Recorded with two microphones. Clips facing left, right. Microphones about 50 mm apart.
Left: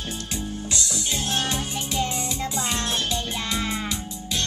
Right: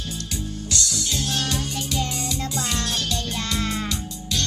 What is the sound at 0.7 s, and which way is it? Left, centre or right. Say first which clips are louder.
Music: right 3 dB; left.